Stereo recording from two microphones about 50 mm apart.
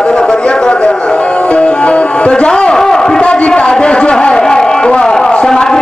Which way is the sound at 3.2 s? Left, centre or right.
Left.